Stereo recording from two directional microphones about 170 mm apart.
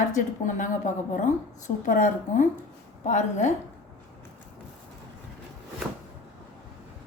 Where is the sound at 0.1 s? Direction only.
50° left (ahead or behind).